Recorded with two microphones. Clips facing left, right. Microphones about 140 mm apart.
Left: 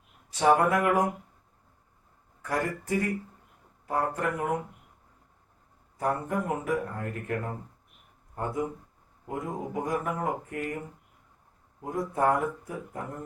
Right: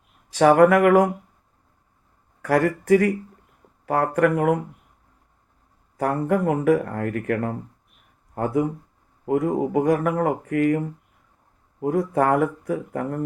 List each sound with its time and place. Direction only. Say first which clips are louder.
0.3 s speech: right 8 dB; 85° right
2.4 s speech: right 10 dB; 85° right
6.0 s speech: right 7 dB; 85° right